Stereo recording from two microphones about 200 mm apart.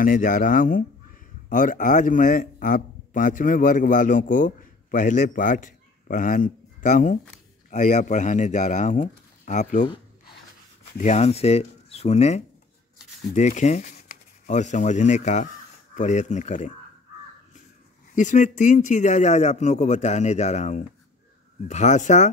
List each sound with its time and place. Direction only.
0.0 s a man's voice: 45° left (ahead or behind)
11.0 s speech: 35° left (ahead or behind)
18.1 s speech: 40° left (ahead or behind)